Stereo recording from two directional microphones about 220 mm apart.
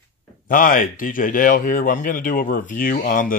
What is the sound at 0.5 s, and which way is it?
Speech, 40° left (ahead or behind).